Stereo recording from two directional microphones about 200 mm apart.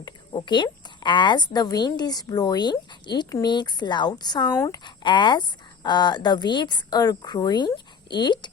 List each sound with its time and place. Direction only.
0.0 s a woman's voice: 20° left (ahead or behind)